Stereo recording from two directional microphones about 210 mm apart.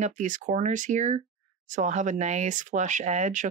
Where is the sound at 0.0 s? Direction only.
35° right (ahead or behind).